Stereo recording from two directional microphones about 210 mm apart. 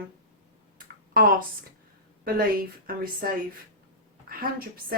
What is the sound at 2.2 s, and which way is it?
A woman's voice, 45° right (ahead or behind).